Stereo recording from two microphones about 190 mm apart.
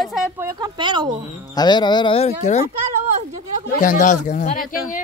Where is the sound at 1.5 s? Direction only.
25° left (ahead or behind).